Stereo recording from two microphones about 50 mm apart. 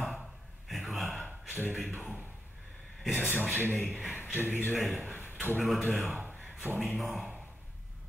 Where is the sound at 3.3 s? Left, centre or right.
Right.